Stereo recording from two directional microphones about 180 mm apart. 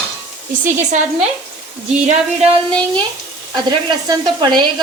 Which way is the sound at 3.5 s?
25° right (ahead or behind).